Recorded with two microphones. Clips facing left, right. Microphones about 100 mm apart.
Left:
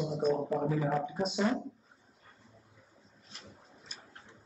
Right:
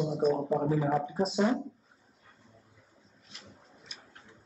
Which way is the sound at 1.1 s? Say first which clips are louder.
Right 4 dB; 35° right (ahead or behind).